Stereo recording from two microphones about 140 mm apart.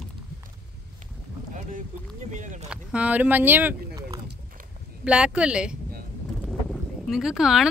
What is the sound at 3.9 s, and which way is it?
Rowboat, 25° right (ahead or behind).